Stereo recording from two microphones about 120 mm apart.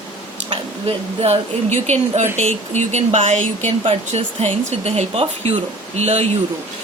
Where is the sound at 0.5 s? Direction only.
60° right (ahead or behind); by 3.7 s 85° right.